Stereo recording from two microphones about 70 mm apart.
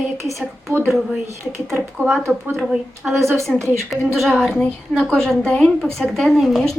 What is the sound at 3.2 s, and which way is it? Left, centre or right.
Speech, right.